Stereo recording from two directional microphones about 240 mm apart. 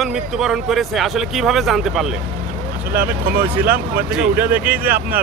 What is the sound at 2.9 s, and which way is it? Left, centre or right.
Speech, right.